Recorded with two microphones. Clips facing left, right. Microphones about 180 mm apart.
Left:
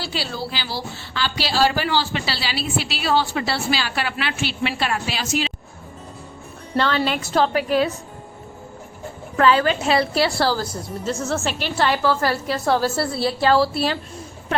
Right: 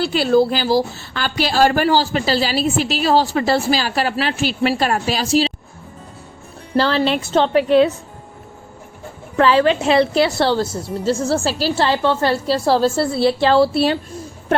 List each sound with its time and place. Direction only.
0.0 s a woman's voice: 50° right (ahead or behind); by 5.5 s 35° right (ahead or behind)
6.7 s a woman's voice: 35° right (ahead or behind)
9.4 s a woman's voice: 30° right (ahead or behind)